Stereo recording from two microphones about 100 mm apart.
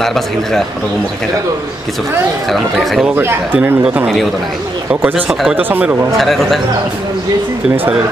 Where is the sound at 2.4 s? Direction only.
Centre (ahead or behind).